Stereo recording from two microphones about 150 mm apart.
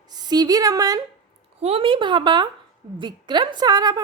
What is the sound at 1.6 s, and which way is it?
A woman's voice, 40° right (ahead or behind).